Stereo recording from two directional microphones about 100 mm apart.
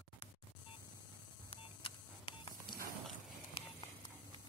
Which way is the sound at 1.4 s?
60° left (ahead or behind).